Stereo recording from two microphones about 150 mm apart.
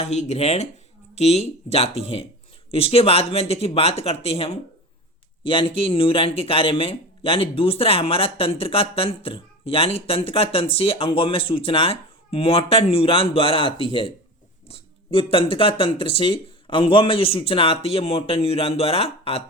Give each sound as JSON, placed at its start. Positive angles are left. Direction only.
{"t": 0.0, "sound": "speech", "side_deg": 50}